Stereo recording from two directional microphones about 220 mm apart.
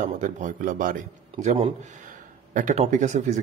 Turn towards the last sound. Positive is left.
turn(degrees=-35)  # may be behind; listen again after turning